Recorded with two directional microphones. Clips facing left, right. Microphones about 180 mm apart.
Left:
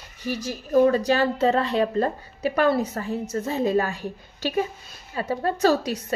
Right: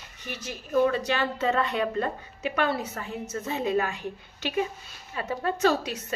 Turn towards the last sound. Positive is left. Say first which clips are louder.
# left 4 dB
turn(degrees=35)  # may be behind; listen again after turning